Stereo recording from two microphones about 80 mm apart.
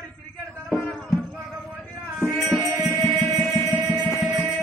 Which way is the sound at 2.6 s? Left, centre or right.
Right.